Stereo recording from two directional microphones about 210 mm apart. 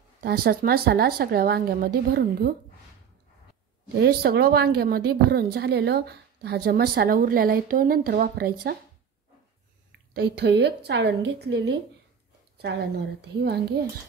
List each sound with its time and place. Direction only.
0.2 s speech: 45° right (ahead or behind)
4.0 s speech: 50° right (ahead or behind)
10.1 s speech: 50° right (ahead or behind)
12.5 s a sound: 50° right (ahead or behind)
13.4 s speech: 50° right (ahead or behind)